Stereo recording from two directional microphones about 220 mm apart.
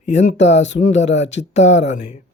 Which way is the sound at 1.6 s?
30° left (ahead or behind).